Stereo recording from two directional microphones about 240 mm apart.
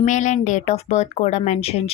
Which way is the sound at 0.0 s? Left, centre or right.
Left.